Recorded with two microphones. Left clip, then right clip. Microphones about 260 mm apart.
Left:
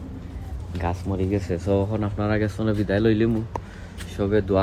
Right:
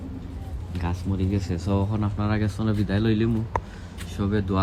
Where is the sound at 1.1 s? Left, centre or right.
Centre.